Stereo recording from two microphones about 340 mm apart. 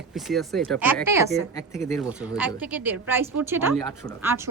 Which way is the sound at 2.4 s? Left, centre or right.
Centre.